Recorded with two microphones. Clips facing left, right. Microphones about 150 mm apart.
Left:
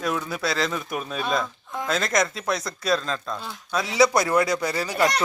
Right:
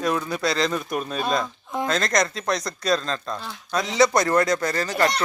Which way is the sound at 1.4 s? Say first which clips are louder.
Right 4 dB; 20° right (ahead or behind).